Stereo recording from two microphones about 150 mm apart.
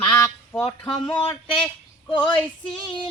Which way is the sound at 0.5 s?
10° left (ahead or behind).